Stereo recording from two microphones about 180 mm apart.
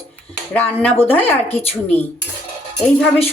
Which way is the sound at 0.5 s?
10° left (ahead or behind).